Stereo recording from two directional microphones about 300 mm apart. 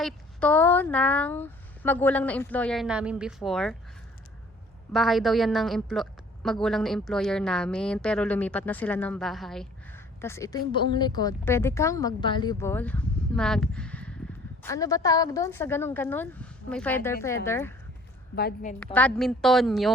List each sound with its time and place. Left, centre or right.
0.0 s a woman's voice: centre
4.9 s a woman's voice: centre
18.3 s a woman's voice: left
18.9 s a woman's voice: centre